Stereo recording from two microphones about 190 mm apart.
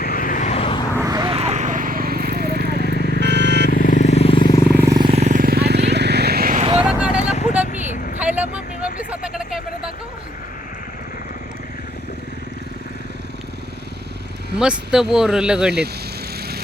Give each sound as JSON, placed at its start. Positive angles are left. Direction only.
{"t": 0.0, "sound": "vehicle", "side_deg": 50}
{"t": 0.9, "sound": "vehicle", "side_deg": -20}
{"t": 1.4, "sound": "vehicle", "side_deg": -35}
{"t": 2.9, "sound": "vehicle", "side_deg": 55}
{"t": 3.2, "sound": "vehicle", "side_deg": -65}
{"t": 3.7, "sound": "vehicle", "side_deg": 45}
{"t": 4.7, "sound": "vehicle", "side_deg": -10}
{"t": 4.9, "sound": "vehicle", "side_deg": -30}
{"t": 6.6, "sound": "vehicle", "side_deg": -30}
{"t": 6.8, "sound": "vehicle", "side_deg": -5}
{"t": 7.7, "sound": "vehicle", "side_deg": 40}
{"t": 8.2, "sound": "a sound", "side_deg": -10}
{"t": 14.6, "sound": "speech", "side_deg": -5}